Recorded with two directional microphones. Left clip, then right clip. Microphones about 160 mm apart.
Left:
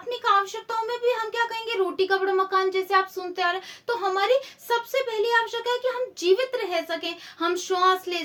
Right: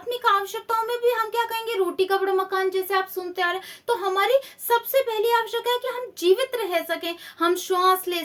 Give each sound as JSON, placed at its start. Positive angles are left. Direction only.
{"t": 0.1, "sound": "speech", "side_deg": -35}